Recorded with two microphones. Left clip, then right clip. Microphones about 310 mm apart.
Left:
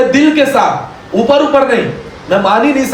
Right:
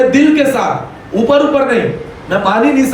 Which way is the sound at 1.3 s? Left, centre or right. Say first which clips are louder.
Left 2 dB; left.